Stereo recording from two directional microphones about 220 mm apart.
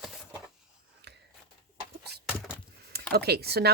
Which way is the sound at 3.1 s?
45° right (ahead or behind).